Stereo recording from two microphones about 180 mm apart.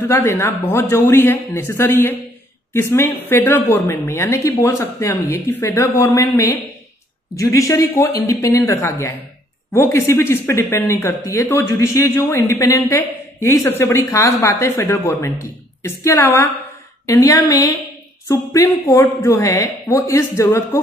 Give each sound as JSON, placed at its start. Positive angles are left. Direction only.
{"t": 0.1, "sound": "speech", "side_deg": 15}